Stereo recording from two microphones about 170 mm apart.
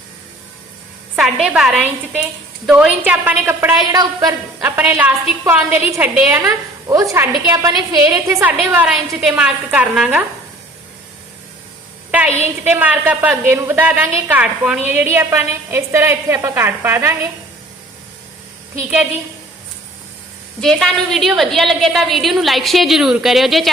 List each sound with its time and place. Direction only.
1.1 s a woman's voice: 5° right (ahead or behind); by 4.7 s 20° right (ahead or behind)
4.8 s a woman's voice: 10° right (ahead or behind)
12.1 s a woman's voice: 10° right (ahead or behind)
20.6 s a woman's voice: centre (ahead or behind)